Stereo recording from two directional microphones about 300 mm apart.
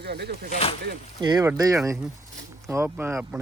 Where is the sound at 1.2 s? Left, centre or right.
Centre.